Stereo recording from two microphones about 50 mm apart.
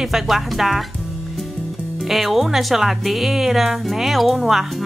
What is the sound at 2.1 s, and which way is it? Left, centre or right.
A woman's voice, centre.